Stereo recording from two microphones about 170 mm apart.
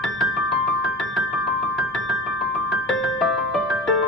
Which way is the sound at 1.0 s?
Centre (ahead or behind).